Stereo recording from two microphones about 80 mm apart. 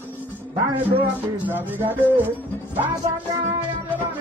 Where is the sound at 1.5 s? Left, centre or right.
Right.